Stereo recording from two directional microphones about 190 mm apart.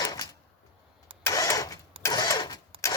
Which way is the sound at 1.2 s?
20° left (ahead or behind).